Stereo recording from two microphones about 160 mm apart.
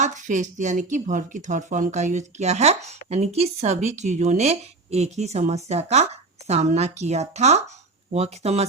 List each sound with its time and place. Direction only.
0.0 s speech: 50° right (ahead or behind)